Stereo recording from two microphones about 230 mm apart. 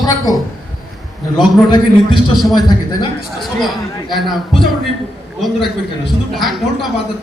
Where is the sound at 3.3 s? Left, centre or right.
Centre.